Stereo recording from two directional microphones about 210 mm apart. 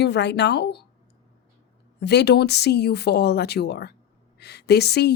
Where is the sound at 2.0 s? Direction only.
55° left (ahead or behind).